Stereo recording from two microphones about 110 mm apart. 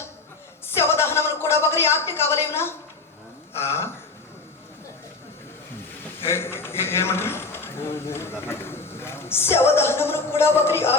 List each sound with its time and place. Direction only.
0.6 s a sound: 25° left (ahead or behind)
3.6 s a man's voice: 25° left (ahead or behind)
6.2 s a man's voice: 25° left (ahead or behind)